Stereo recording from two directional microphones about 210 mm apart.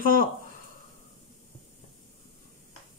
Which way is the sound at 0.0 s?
40° left (ahead or behind).